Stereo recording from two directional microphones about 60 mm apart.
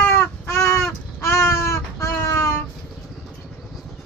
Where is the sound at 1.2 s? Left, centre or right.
Left.